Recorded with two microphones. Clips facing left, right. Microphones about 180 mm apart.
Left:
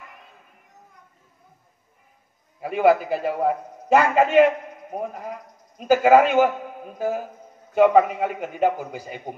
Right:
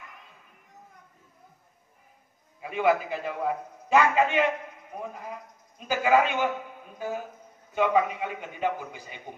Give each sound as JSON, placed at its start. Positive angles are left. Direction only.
{"t": 2.6, "sound": "a man's voice", "side_deg": 40}
{"t": 3.3, "sound": "a man's voice", "side_deg": 50}